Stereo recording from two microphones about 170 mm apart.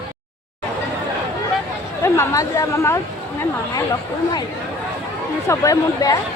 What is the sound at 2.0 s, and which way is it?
A woman's voice, 15° left (ahead or behind).